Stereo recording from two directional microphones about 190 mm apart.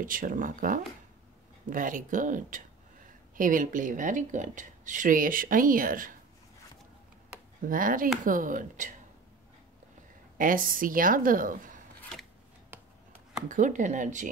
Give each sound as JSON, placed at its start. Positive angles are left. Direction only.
{"t": 0.0, "sound": "speech", "side_deg": -45}
{"t": 7.6, "sound": "speech", "side_deg": -45}
{"t": 10.3, "sound": "speech", "side_deg": -45}
{"t": 12.0, "sound": "a sound", "side_deg": 0}
{"t": 13.5, "sound": "speech", "side_deg": -40}